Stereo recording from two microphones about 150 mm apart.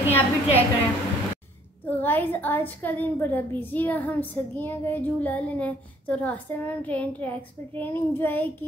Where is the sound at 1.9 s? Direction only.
10° left (ahead or behind).